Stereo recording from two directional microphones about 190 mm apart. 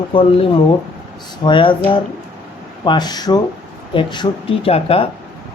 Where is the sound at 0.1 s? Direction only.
25° left (ahead or behind).